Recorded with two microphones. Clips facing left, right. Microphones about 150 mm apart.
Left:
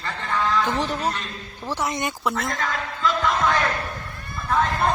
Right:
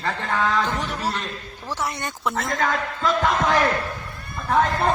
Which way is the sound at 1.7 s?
15° left (ahead or behind).